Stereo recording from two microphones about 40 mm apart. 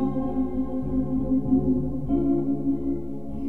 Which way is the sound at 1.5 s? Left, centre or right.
Left.